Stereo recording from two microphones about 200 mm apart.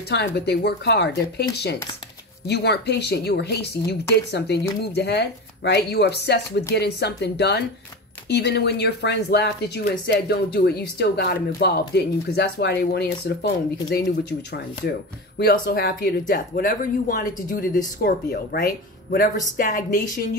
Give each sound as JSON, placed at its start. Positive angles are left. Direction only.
{"t": 0.5, "sound": "speech", "side_deg": 55}